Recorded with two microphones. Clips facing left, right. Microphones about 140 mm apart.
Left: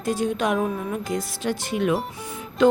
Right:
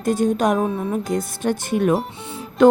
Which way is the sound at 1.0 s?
50° right (ahead or behind).